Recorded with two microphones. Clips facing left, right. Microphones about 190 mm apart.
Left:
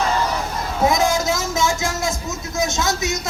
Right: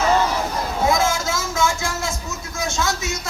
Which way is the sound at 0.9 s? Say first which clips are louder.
Left 3 dB; 20° left (ahead or behind).